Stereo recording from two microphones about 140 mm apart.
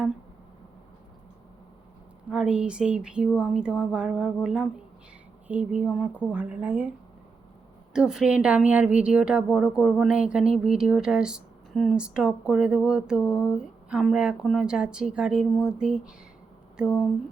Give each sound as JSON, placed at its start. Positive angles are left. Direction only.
{"t": 2.3, "sound": "speech", "side_deg": -5}
{"t": 7.9, "sound": "a woman's voice", "side_deg": -5}